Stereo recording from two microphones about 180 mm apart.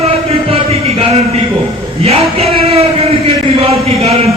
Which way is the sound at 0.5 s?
35° right (ahead or behind).